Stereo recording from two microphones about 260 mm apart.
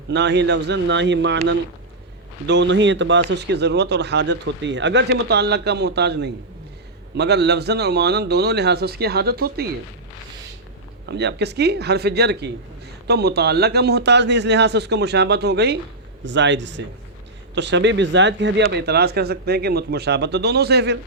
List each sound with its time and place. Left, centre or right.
0.1 s speech: right
11.0 s a man's voice: right